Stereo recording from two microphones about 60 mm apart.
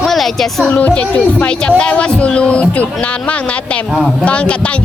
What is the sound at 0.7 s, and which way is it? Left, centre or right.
A man's voice, left.